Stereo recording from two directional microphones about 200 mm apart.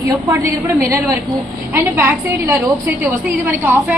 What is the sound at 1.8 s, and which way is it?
A woman's voice, 10° right (ahead or behind).